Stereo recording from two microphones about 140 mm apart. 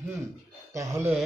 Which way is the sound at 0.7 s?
20° right (ahead or behind).